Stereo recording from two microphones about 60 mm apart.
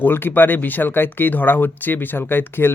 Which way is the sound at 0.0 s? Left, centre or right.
Left.